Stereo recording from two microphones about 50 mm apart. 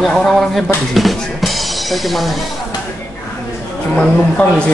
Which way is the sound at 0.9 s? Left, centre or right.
Centre.